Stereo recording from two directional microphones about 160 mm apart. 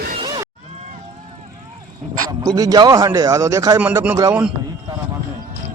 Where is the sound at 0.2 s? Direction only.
25° right (ahead or behind).